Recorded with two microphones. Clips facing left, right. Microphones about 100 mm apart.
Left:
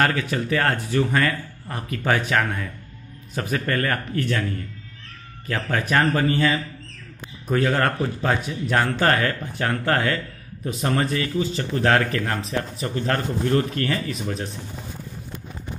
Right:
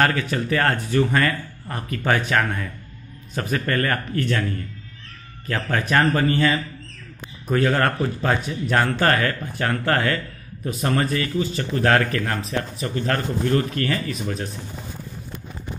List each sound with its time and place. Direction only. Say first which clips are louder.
0.0 s a man's voice: right 1 dB; 10° left (ahead or behind)
5.5 s a man's voice: right 1 dB; 10° left (ahead or behind); by 14.5 s 25° left (ahead or behind)